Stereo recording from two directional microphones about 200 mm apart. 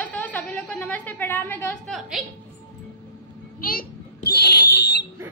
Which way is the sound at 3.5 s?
45° left (ahead or behind).